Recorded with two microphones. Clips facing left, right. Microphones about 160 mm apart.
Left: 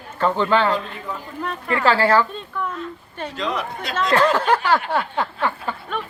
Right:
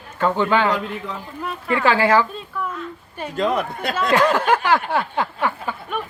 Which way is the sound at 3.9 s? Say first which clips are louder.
Even; 10° right (ahead or behind).